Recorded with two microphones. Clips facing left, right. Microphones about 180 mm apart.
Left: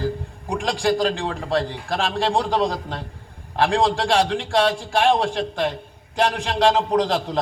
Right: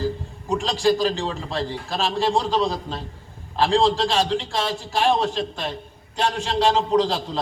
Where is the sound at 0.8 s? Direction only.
55° left (ahead or behind).